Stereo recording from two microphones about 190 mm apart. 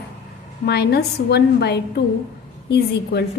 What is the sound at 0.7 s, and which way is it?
A woman's voice, 60° left (ahead or behind).